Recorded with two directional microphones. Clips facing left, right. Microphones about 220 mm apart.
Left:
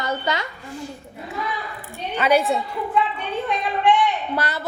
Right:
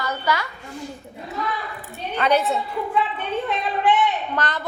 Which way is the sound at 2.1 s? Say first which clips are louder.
Left 1 dB; 10° left (ahead or behind).